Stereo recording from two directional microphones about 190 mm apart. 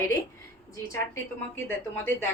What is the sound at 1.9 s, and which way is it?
Speech, 10° left (ahead or behind).